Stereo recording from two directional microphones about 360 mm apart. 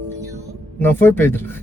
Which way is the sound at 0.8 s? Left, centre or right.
Centre.